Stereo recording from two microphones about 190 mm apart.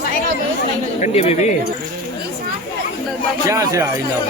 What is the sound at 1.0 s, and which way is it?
Speech, 35° left (ahead or behind).